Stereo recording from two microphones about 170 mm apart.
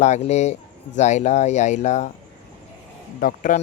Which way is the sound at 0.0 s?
40° left (ahead or behind).